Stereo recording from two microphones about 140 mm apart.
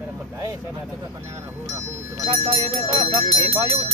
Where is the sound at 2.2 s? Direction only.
40° right (ahead or behind).